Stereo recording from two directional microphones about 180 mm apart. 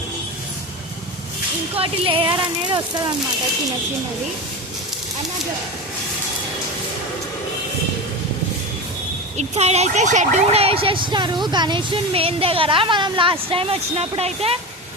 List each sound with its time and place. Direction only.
1.7 s speech: 30° right (ahead or behind)
9.4 s speech: 35° right (ahead or behind)